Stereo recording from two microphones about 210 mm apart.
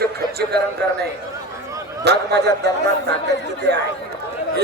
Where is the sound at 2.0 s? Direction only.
50° right (ahead or behind).